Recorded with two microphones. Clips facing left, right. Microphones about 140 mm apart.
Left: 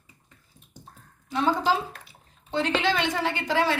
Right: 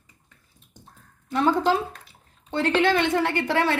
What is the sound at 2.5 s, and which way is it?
A woman's voice, 55° right (ahead or behind).